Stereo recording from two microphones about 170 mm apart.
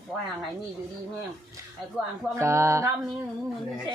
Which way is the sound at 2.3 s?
15° right (ahead or behind).